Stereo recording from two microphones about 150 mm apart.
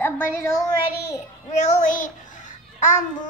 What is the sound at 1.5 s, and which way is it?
Child singing, 50° left (ahead or behind).